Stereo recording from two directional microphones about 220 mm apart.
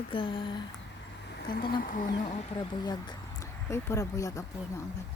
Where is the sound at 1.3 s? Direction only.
45° left (ahead or behind).